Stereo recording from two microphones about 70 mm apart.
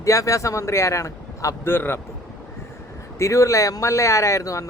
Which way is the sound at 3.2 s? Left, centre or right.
Left.